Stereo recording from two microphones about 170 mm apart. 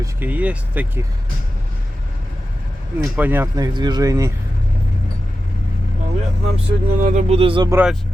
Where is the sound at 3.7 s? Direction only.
25° right (ahead or behind).